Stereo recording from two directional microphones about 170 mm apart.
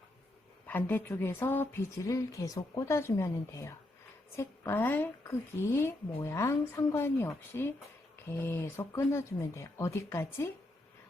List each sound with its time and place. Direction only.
0.7 s a woman's voice: 10° left (ahead or behind)